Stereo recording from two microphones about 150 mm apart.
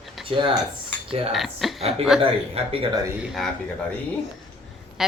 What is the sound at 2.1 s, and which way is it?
Speech, 40° right (ahead or behind).